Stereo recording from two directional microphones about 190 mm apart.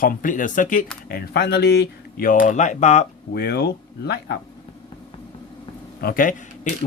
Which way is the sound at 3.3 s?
55° left (ahead or behind).